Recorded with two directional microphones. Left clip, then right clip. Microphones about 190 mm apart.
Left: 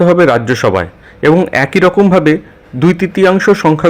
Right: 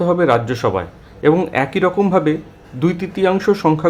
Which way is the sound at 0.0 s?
25° left (ahead or behind).